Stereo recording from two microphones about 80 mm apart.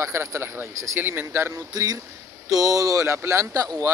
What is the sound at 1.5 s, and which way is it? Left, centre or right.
A man's voice, right.